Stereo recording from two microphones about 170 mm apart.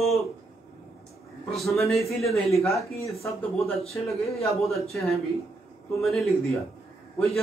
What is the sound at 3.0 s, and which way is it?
Speech, 20° left (ahead or behind).